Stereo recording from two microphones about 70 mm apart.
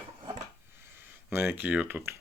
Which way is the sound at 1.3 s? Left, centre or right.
Right.